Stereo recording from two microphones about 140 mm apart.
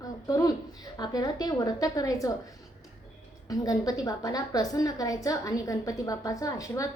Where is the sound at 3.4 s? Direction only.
25° left (ahead or behind).